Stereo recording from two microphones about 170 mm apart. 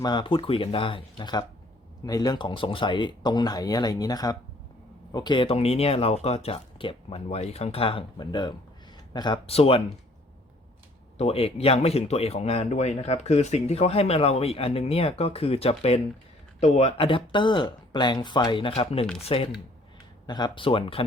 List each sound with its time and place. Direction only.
0.0 s speech: 25° left (ahead or behind)
11.2 s speech: 35° left (ahead or behind)